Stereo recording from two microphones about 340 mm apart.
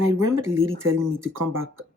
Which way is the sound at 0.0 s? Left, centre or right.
Right.